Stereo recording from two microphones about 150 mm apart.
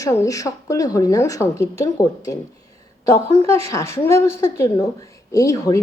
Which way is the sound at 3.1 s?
20° left (ahead or behind).